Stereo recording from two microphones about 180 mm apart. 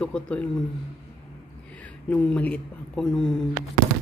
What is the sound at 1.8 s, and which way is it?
Speech, 5° left (ahead or behind).